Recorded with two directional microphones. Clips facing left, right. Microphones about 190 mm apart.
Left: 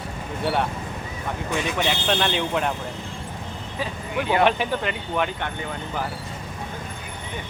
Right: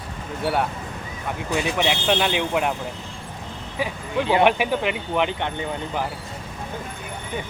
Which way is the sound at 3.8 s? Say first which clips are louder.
Right 3 dB; 15° right (ahead or behind).